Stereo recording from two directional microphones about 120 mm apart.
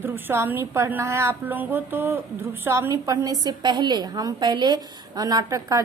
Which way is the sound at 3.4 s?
40° right (ahead or behind).